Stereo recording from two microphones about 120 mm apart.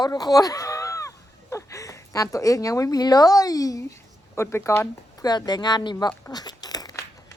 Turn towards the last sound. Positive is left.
turn(degrees=30)  # may be behind; listen again after turning